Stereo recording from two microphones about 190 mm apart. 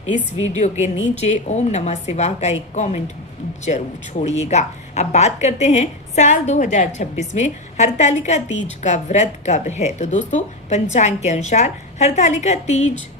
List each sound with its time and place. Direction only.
0.3 s a woman's voice: 35° left (ahead or behind)